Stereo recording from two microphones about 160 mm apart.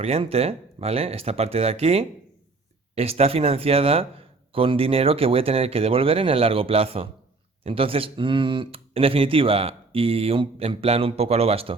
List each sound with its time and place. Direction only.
0.0 s speech: 40° right (ahead or behind)